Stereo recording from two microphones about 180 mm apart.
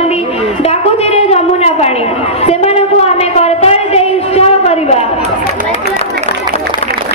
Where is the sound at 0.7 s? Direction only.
35° left (ahead or behind).